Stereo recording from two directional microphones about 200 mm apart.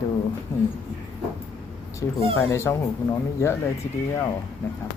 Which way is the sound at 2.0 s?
15° left (ahead or behind).